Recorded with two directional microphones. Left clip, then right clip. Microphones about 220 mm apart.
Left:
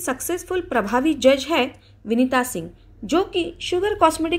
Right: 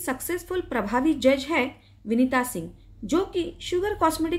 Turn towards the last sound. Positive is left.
turn(degrees=10)  # may be behind; listen again after turning